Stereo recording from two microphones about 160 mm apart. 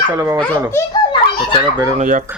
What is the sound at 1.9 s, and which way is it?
Speech, 55° right (ahead or behind).